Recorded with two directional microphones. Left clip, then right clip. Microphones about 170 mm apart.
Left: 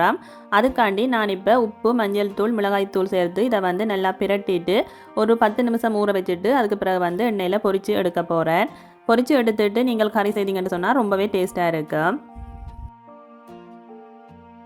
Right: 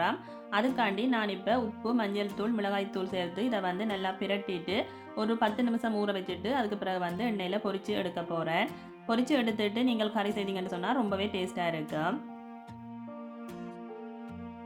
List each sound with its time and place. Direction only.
0.0 s speech: 45° left (ahead or behind)